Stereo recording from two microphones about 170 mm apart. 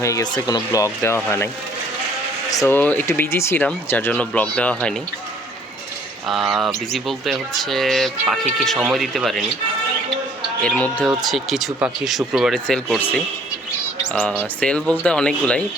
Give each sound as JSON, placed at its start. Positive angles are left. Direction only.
{"t": 0.0, "sound": "speech", "side_deg": 20}
{"t": 2.5, "sound": "speech", "side_deg": 15}
{"t": 6.2, "sound": "speech", "side_deg": 0}
{"t": 10.6, "sound": "speech", "side_deg": 5}